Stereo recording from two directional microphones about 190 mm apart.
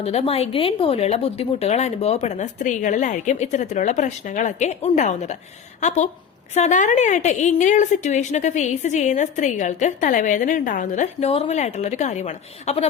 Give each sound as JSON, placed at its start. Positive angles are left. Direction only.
{"t": 0.0, "sound": "a woman's voice", "side_deg": 30}
{"t": 6.5, "sound": "a woman's voice", "side_deg": 40}